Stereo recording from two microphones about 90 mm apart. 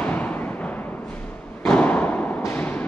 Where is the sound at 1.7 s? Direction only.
15° left (ahead or behind).